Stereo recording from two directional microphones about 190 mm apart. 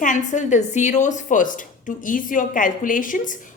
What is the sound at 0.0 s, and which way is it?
A woman's voice, 40° left (ahead or behind).